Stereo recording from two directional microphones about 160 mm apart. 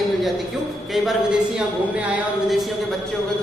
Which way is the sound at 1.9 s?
10° right (ahead or behind).